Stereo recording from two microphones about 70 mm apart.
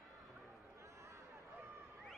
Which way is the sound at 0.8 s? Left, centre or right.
Right.